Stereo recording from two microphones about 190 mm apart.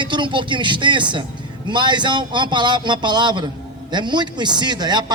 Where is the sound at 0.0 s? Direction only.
25° right (ahead or behind).